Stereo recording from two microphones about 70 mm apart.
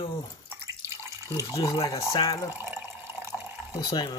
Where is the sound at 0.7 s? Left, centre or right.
Right.